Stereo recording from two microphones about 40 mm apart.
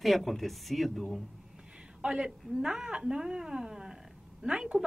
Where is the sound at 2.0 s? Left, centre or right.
Right.